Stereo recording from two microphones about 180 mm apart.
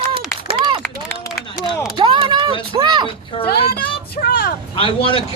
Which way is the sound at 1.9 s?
25° right (ahead or behind).